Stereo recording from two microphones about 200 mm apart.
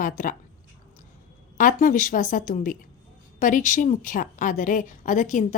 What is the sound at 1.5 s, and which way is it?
A woman's voice, 40° left (ahead or behind).